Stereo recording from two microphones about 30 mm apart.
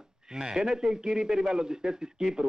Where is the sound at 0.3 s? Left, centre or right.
Right.